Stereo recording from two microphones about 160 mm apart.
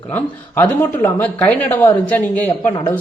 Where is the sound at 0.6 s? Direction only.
10° left (ahead or behind).